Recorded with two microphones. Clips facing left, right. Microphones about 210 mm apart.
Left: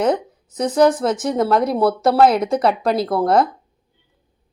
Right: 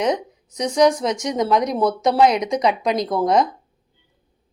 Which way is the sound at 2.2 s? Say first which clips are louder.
Left 2 dB; 15° right (ahead or behind).